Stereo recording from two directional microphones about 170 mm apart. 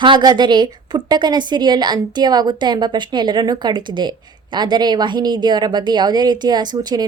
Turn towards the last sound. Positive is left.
turn(degrees=-25)  # may be behind; listen again after turning